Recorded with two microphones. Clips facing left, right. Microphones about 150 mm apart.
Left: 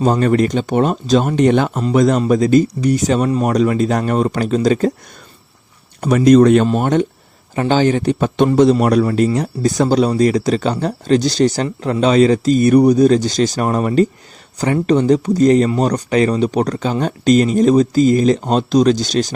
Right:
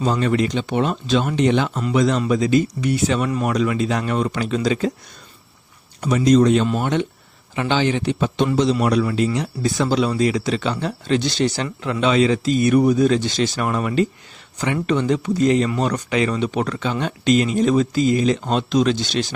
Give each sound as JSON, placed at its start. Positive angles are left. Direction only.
{"t": 0.0, "sound": "speech", "side_deg": 45}
{"t": 6.0, "sound": "speech", "side_deg": 55}
{"t": 6.7, "sound": "speech", "side_deg": 45}